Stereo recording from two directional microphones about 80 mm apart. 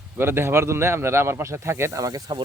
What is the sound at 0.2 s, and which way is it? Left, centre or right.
Speech, right.